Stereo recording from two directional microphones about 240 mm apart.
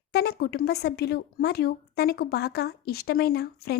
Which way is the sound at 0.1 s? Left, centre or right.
Left.